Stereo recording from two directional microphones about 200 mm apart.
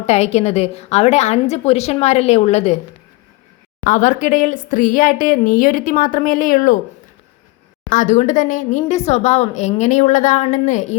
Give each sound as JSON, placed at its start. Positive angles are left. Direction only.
{"t": 0.0, "sound": "speech", "side_deg": 35}
{"t": 3.8, "sound": "speech", "side_deg": 40}
{"t": 7.9, "sound": "speech", "side_deg": 40}